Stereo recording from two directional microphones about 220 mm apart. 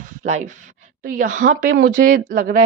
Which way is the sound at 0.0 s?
35° right (ahead or behind).